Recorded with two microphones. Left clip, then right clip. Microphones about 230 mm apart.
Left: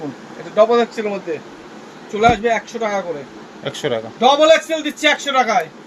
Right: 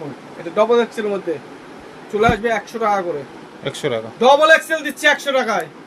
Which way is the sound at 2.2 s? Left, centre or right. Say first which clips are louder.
Left 2 dB; right.